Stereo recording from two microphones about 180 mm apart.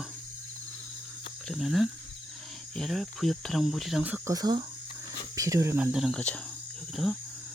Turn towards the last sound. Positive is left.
turn(degrees=0)  # may be behind; listen again after turning